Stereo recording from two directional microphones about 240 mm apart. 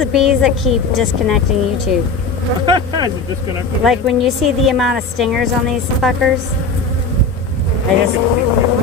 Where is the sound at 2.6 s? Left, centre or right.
Centre.